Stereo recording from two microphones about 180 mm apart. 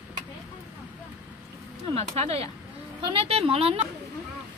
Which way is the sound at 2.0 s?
35° right (ahead or behind).